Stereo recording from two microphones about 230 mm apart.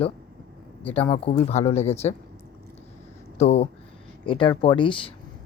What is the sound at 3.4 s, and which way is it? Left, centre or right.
Speech, left.